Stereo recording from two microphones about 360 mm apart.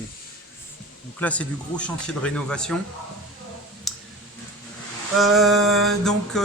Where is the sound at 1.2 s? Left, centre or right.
Centre.